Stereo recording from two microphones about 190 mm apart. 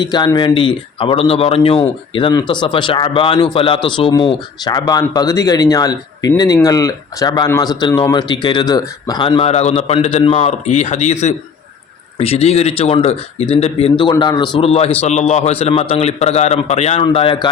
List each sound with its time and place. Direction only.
0.0 s a man's voice: 25° left (ahead or behind)